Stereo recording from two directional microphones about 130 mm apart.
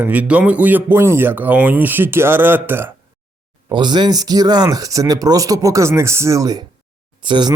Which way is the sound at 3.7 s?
35° right (ahead or behind).